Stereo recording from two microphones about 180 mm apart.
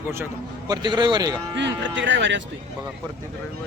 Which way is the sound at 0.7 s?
25° right (ahead or behind).